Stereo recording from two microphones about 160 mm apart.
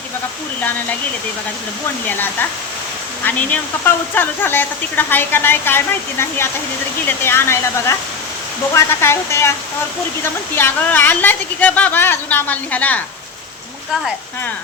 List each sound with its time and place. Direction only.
2.0 s speech: 10° left (ahead or behind)